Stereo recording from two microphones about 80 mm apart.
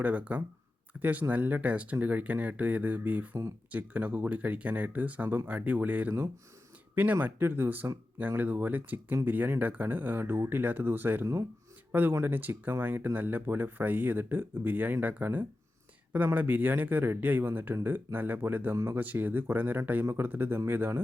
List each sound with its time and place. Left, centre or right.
0.0 s speech: centre